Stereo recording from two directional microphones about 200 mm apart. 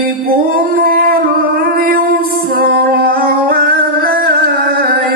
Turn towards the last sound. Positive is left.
turn(degrees=-50)  # may be behind; listen again after turning